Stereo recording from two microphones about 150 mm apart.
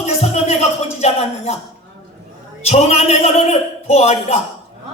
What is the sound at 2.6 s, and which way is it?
Speech, 45° left (ahead or behind).